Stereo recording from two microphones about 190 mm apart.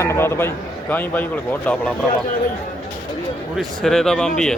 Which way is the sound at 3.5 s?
Centre (ahead or behind).